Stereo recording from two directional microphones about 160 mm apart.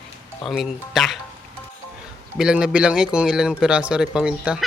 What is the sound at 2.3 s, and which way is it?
Speech, 5° right (ahead or behind).